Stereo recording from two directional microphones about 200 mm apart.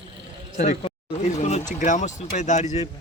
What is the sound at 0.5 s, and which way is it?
Speech, 30° left (ahead or behind).